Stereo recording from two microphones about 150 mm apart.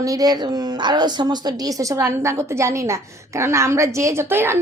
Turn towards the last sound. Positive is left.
turn(degrees=-15)  # may be behind; listen again after turning